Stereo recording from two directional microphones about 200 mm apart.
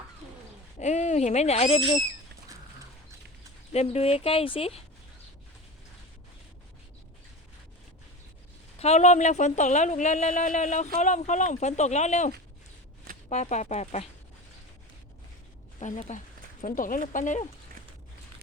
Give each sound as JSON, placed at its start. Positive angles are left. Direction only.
{"t": 0.8, "sound": "speech", "side_deg": 35}
{"t": 3.7, "sound": "speech", "side_deg": 30}
{"t": 8.8, "sound": "speech", "side_deg": 35}
{"t": 13.3, "sound": "speech", "side_deg": 35}
{"t": 15.8, "sound": "speech", "side_deg": 35}